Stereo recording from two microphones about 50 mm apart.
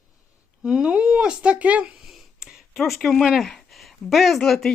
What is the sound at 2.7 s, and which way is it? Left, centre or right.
Speech, centre.